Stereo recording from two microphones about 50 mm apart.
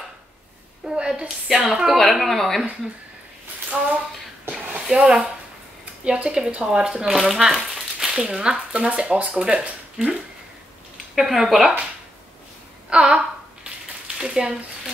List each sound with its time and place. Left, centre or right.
0.8 s a woman's voice: centre
2.0 s speech: centre
3.7 s speech: centre
4.9 s a woman's voice: centre
8.2 s speech: centre
11.1 s speech: centre
12.9 s speech: centre